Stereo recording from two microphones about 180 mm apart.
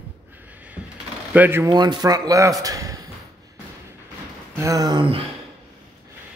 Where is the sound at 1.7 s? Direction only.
25° right (ahead or behind).